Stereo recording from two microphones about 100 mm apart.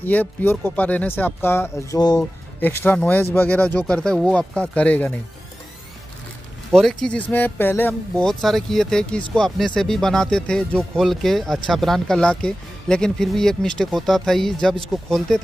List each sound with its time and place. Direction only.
0.0 s speech: 15° left (ahead or behind)
2.0 s speech: 45° left (ahead or behind)
2.6 s speech: 20° left (ahead or behind)
6.7 s speech: 5° left (ahead or behind)
8.2 s speech: 5° left (ahead or behind)